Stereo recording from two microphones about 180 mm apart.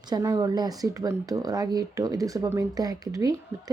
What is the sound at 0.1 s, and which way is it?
Speech, 20° right (ahead or behind).